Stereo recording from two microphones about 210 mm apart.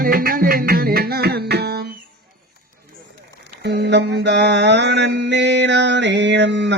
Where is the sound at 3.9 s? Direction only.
55° right (ahead or behind).